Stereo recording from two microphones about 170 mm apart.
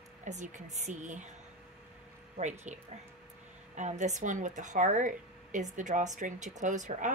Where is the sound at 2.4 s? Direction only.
45° right (ahead or behind).